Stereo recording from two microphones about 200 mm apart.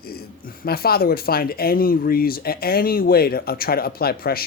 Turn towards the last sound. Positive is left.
turn(degrees=50)  # may be behind; listen again after turning